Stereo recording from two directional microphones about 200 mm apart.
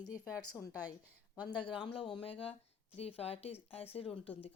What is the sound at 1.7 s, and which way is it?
A woman's voice, 25° left (ahead or behind).